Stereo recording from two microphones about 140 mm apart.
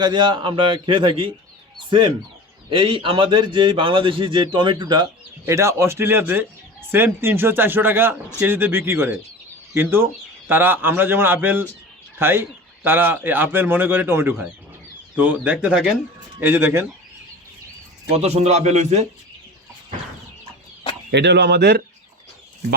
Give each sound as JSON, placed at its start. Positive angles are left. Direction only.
{"t": 0.0, "sound": "a man's voice", "side_deg": -35}
{"t": 5.5, "sound": "a man's voice", "side_deg": -20}
{"t": 16.4, "sound": "a man's voice", "side_deg": -15}
{"t": 18.1, "sound": "a man's voice", "side_deg": -50}